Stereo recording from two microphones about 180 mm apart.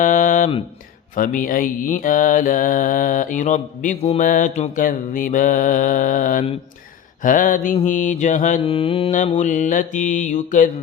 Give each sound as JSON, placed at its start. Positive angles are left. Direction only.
{"t": 0.0, "sound": "mantra", "side_deg": 50}
{"t": 8.6, "sound": "mantra", "side_deg": 30}